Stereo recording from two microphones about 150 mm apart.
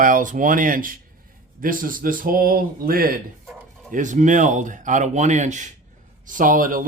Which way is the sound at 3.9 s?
60° right (ahead or behind).